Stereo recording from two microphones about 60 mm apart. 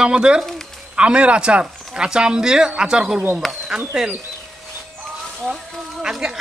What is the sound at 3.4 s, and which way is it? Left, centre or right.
Speech, centre.